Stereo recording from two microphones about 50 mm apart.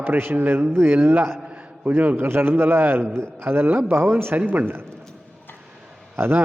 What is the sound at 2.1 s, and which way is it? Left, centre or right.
A man's voice, right.